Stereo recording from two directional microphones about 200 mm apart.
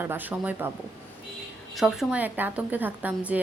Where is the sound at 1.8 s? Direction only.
Centre (ahead or behind).